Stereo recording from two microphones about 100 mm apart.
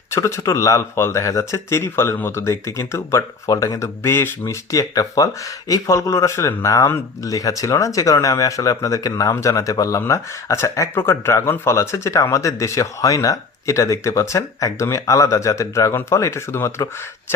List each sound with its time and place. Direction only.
0.1 s speech: 30° left (ahead or behind)
4.7 s speech: 35° left (ahead or behind)